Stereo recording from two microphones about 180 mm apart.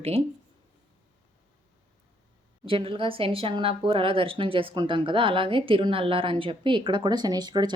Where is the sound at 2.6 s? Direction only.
30° right (ahead or behind).